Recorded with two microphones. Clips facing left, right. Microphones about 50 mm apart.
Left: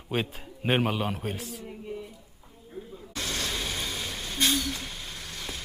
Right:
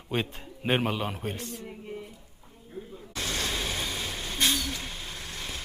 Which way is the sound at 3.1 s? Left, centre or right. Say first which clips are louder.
Right 1 dB; right.